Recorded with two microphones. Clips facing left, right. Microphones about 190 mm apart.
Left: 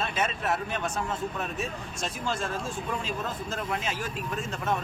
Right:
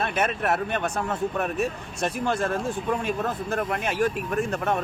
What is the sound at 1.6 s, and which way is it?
Speech, 60° right (ahead or behind).